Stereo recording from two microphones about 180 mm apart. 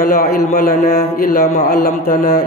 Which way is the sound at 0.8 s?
40° left (ahead or behind).